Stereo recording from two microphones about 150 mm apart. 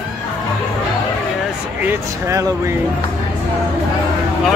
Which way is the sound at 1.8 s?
20° right (ahead or behind).